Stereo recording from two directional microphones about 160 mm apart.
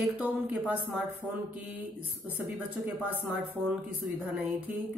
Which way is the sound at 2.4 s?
10° right (ahead or behind).